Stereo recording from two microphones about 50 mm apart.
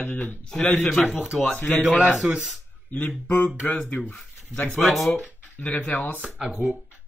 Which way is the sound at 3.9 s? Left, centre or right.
Left.